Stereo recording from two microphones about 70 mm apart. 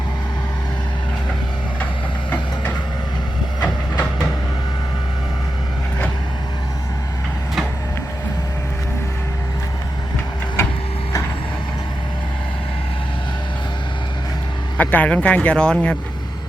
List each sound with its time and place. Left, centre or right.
10.6 s printer: left
14.8 s speech: left